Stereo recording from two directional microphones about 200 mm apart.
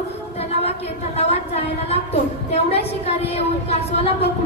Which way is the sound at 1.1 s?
30° left (ahead or behind).